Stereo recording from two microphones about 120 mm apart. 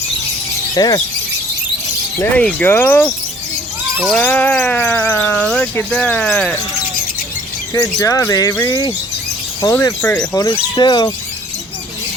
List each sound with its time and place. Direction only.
0.7 s speech: 30° left (ahead or behind)
2.3 s a sound: 10° left (ahead or behind)
4.2 s a sound: 15° left (ahead or behind)
7.7 s speech: 30° left (ahead or behind)
9.6 s speech: 25° left (ahead or behind)
10.3 s speech: 35° left (ahead or behind)